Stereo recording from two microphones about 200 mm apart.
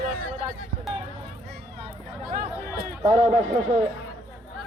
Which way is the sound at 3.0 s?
35° right (ahead or behind).